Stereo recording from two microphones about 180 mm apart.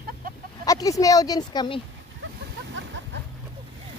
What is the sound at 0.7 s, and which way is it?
Speech, 20° left (ahead or behind).